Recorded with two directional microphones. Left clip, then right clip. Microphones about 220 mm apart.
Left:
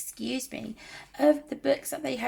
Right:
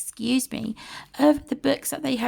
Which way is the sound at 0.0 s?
40° right (ahead or behind).